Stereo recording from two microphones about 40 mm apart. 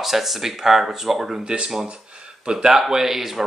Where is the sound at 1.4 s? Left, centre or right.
Right.